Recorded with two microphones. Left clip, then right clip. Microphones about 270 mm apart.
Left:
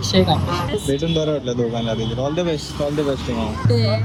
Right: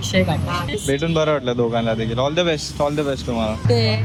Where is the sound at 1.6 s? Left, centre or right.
Centre.